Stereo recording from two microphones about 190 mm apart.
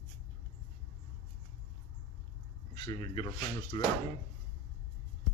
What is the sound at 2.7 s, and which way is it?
Speech, 25° left (ahead or behind).